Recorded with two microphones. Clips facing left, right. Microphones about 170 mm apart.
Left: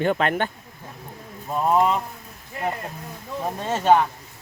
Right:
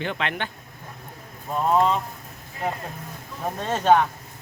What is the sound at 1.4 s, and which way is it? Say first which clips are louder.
Speech: left 1 dB; 10° left (ahead or behind).